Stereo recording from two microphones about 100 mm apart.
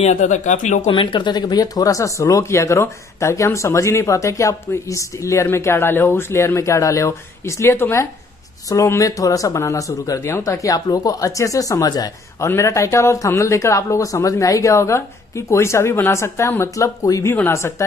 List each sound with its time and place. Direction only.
0.8 s speech: 50° left (ahead or behind); by 17.8 s 25° left (ahead or behind)